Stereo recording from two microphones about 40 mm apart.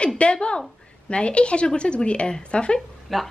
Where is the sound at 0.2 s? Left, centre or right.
Left.